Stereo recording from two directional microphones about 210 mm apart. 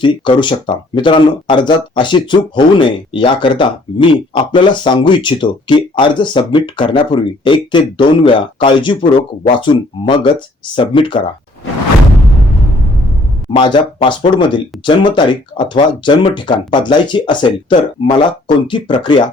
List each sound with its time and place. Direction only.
0.0 s speech: 25° left (ahead or behind)
13.5 s speech: 25° left (ahead or behind)